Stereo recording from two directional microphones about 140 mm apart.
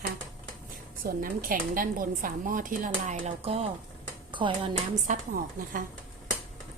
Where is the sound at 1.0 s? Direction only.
90° right; by 3.7 s 45° right (ahead or behind).